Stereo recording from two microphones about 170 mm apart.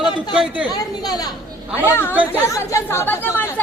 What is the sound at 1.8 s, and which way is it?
Speech, 15° left (ahead or behind).